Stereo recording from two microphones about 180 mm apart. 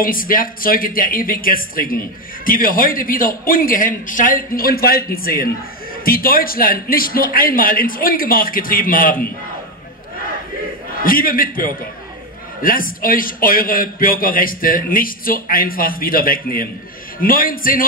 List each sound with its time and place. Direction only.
0.0 s speech: 50° left (ahead or behind)
11.0 s speech: 50° left (ahead or behind)